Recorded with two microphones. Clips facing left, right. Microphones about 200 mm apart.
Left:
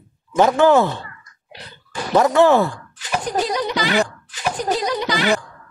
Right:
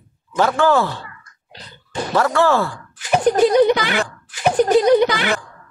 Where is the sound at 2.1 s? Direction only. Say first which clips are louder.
Left 3 dB; 20° left (ahead or behind).